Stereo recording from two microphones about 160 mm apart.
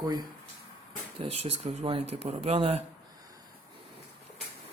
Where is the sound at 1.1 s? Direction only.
40° right (ahead or behind).